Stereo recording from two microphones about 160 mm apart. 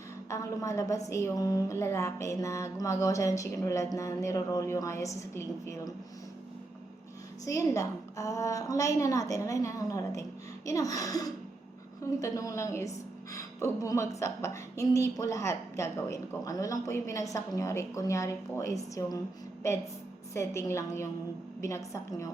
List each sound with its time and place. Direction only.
0.3 s a woman's voice: 20° left (ahead or behind)
7.4 s a woman's voice: 20° left (ahead or behind)
20.3 s a woman's voice: 15° left (ahead or behind)